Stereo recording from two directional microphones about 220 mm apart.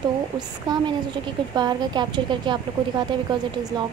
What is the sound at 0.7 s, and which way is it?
A woman's voice, 20° right (ahead or behind).